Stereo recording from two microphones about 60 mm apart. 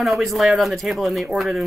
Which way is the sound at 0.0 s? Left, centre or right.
Centre.